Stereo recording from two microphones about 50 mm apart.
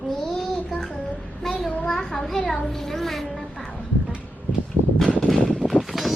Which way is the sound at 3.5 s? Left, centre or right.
Centre.